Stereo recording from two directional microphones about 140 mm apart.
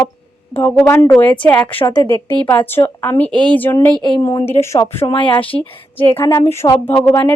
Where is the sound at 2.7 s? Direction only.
15° left (ahead or behind).